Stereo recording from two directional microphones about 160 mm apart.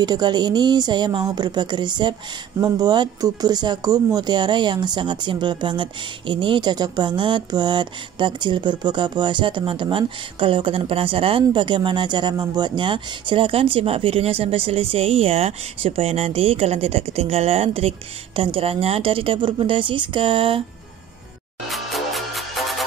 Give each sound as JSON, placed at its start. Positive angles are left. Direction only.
{"t": 0.0, "sound": "speech", "side_deg": -25}
{"t": 21.6, "sound": "music", "side_deg": 0}